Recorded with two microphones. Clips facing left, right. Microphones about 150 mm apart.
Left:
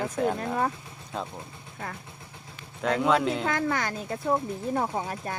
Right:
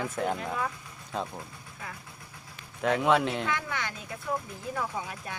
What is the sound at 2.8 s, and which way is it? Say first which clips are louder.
Speech: left 1 dB; 5° right (ahead or behind).